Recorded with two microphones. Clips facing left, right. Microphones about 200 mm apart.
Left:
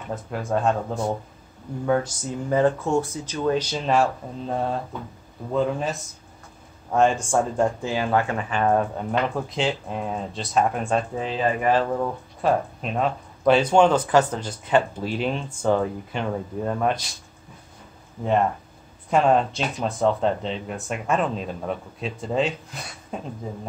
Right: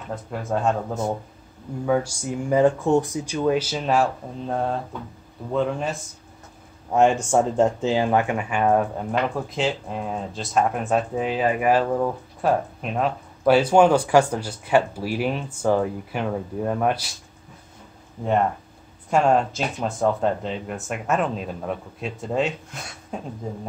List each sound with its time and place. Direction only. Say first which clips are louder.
0.1 s speech: left 1 dB; centre (ahead or behind)
1.9 s speech: right 1 dB; 10° right (ahead or behind)
6.9 s speech: right 2 dB; 15° right (ahead or behind)
19.0 s speech: even; centre (ahead or behind)